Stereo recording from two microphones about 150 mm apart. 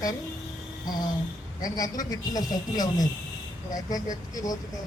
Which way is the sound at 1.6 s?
25° left (ahead or behind).